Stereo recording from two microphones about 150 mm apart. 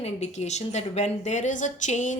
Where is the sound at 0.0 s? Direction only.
45° left (ahead or behind).